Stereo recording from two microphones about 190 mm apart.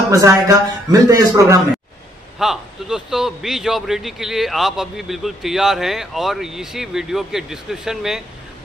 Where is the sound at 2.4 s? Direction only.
Centre (ahead or behind).